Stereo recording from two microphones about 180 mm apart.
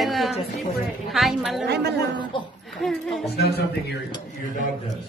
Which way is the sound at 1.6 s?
65° right (ahead or behind).